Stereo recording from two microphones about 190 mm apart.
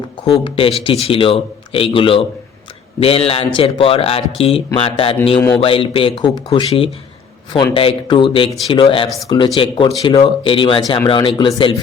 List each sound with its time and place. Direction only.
0.4 s speech: 25° left (ahead or behind)
8.4 s speech: centre (ahead or behind)
8.7 s speech: 25° left (ahead or behind)